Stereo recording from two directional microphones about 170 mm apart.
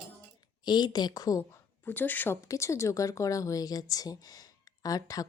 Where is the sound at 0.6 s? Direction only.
25° left (ahead or behind).